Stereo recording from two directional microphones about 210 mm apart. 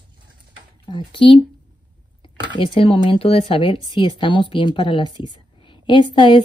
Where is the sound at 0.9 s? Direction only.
25° left (ahead or behind).